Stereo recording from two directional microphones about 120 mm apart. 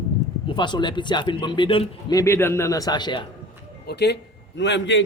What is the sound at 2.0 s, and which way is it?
A man's voice, 25° left (ahead or behind).